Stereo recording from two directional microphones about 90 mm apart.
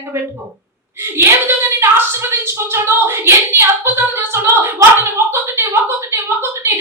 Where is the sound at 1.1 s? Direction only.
25° right (ahead or behind).